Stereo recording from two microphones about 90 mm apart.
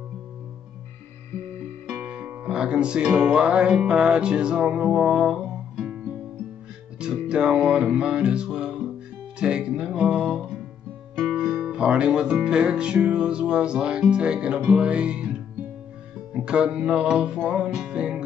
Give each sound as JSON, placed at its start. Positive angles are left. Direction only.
{"t": 1.9, "sound": "music", "side_deg": -10}